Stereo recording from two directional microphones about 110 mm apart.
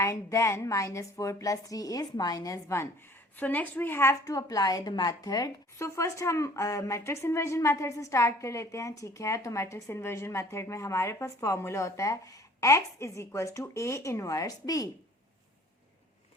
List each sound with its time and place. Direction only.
0.0 s a woman's voice: 25° left (ahead or behind)
3.3 s a woman's voice: 15° left (ahead or behind); by 14.8 s 35° left (ahead or behind)